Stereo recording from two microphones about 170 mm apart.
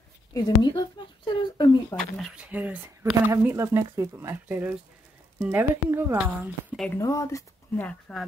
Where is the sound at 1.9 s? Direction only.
Centre (ahead or behind).